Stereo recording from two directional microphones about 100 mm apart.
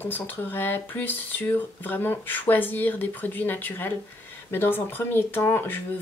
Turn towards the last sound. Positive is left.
turn(degrees=20)  # may be behind; listen again after turning